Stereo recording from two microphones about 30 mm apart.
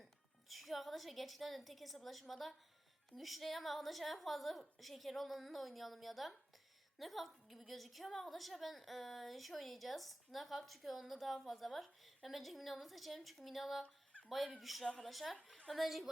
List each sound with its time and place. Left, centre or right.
0.0 s a woman's voice: centre
13.8 s a sound: left
14.3 s a woman's voice: centre